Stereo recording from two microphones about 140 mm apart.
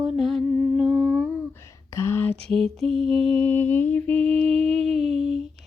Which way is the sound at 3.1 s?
45° right (ahead or behind).